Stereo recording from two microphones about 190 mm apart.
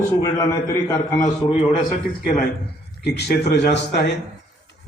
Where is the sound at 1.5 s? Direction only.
35° left (ahead or behind).